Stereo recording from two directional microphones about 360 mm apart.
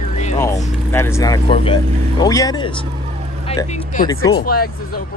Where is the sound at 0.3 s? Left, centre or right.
Centre.